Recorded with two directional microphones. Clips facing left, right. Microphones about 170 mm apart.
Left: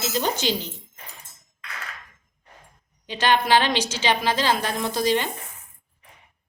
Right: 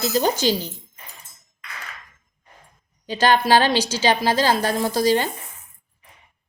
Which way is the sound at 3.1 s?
40° right (ahead or behind).